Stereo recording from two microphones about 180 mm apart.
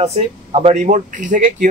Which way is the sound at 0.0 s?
35° right (ahead or behind).